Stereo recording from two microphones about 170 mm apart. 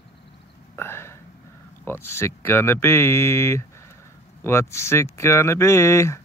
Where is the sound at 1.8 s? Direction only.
15° left (ahead or behind).